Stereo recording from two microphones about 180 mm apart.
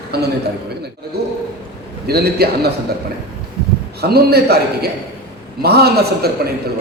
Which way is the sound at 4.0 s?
60° right (ahead or behind).